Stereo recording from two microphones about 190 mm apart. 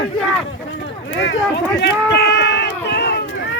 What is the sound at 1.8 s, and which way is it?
Run, 60° left (ahead or behind).